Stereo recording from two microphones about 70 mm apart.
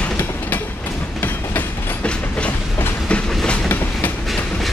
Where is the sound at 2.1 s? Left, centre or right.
Centre.